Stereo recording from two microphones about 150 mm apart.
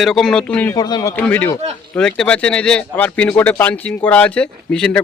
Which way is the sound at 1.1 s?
10° left (ahead or behind).